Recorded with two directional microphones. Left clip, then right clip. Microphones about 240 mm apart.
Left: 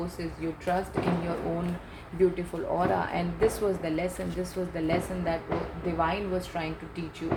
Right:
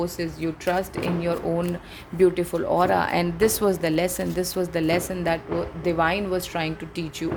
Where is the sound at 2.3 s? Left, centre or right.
Right.